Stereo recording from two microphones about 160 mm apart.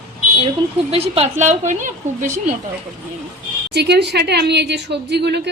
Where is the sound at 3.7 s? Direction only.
90° right.